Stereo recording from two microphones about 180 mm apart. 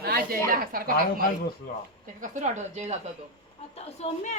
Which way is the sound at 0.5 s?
55° right (ahead or behind).